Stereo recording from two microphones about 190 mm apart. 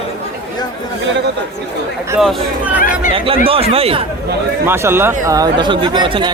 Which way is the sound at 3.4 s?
30° right (ahead or behind).